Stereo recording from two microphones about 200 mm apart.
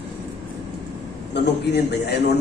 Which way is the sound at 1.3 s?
55° left (ahead or behind).